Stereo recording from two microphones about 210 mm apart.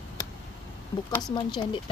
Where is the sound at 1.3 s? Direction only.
20° left (ahead or behind).